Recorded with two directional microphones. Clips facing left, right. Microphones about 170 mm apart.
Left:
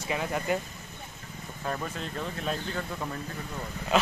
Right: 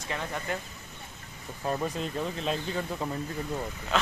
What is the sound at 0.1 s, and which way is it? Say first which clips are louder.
Speech: left 4 dB; 10° left (ahead or behind).